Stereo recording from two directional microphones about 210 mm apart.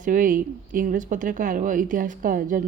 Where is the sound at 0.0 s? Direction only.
40° right (ahead or behind).